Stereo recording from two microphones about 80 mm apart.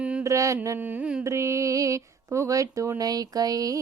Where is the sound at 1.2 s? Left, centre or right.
Right.